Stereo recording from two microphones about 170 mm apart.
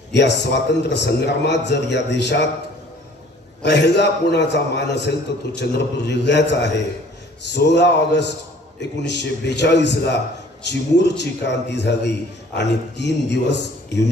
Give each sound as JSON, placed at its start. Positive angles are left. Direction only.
{"t": 0.1, "sound": "a man's voice", "side_deg": 85}
{"t": 3.6, "sound": "a man's voice", "side_deg": 90}